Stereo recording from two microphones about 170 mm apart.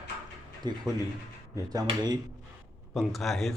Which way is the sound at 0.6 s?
25° right (ahead or behind).